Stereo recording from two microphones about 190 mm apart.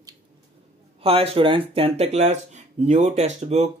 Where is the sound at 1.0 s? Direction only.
30° right (ahead or behind).